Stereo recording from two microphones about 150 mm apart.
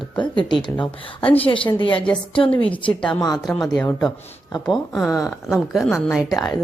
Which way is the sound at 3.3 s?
Centre (ahead or behind).